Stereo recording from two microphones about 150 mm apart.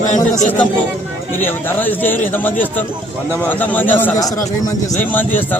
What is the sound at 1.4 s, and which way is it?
A man's voice, 15° left (ahead or behind).